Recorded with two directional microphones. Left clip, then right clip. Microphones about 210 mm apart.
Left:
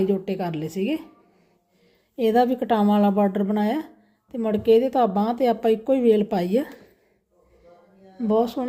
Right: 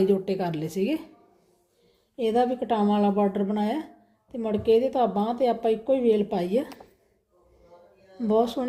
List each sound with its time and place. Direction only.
0.0 s a woman's voice: 10° left (ahead or behind)
2.1 s speech: 30° left (ahead or behind)
8.3 s a woman's voice: 15° left (ahead or behind)